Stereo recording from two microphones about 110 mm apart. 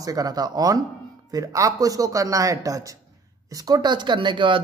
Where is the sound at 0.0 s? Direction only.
35° right (ahead or behind).